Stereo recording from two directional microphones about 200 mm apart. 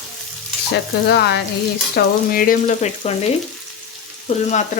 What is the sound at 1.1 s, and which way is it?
Frying, 60° left (ahead or behind).